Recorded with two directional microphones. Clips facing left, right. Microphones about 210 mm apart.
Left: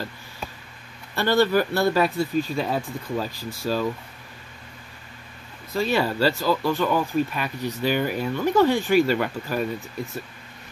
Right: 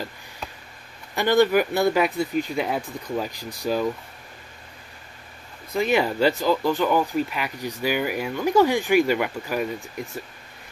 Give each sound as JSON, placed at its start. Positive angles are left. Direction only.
{"t": 1.1, "sound": "speech", "side_deg": -15}
{"t": 5.7, "sound": "speech", "side_deg": -15}